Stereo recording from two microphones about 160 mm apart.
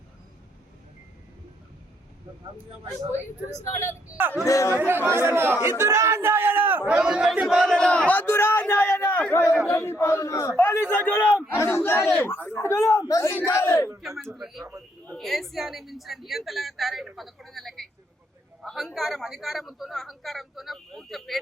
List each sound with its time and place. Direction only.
4.1 s speech: 15° right (ahead or behind)
4.4 s speech: 20° left (ahead or behind)
4.8 s speech: 15° right (ahead or behind)
5.6 s a sound: 15° right (ahead or behind); by 9.6 s 15° left (ahead or behind)
9.6 s a man's voice: 15° left (ahead or behind)
14.3 s a woman's voice: centre (ahead or behind)